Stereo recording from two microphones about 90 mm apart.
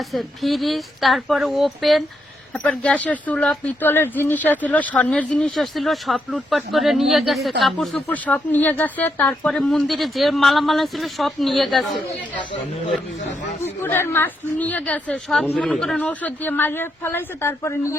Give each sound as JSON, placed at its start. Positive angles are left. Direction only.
{"t": 0.1, "sound": "speech", "side_deg": 0}
{"t": 8.0, "sound": "a woman's voice", "side_deg": 20}
{"t": 9.5, "sound": "speech", "side_deg": 5}
{"t": 13.8, "sound": "a woman's voice", "side_deg": 25}
{"t": 16.0, "sound": "a woman's voice", "side_deg": 20}